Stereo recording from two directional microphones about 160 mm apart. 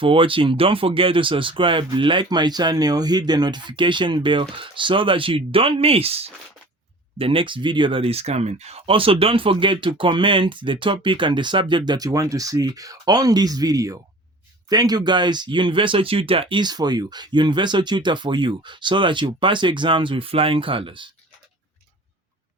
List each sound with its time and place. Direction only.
0.0 s speech: 35° right (ahead or behind)